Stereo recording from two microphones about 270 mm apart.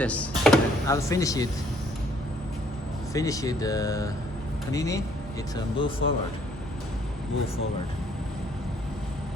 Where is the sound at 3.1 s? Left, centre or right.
Centre.